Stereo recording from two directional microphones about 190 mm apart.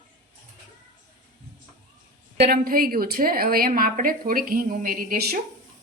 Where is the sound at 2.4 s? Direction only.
50° right (ahead or behind).